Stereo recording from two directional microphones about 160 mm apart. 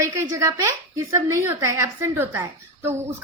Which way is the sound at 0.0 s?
20° right (ahead or behind).